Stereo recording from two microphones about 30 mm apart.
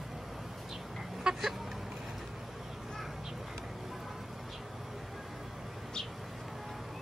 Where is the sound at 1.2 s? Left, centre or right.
Right.